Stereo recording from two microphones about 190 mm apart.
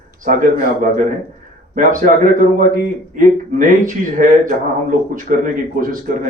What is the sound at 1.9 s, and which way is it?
A man's voice, 45° right (ahead or behind).